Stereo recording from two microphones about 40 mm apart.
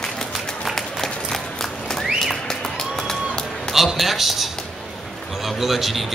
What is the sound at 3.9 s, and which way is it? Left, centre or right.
Speech, centre.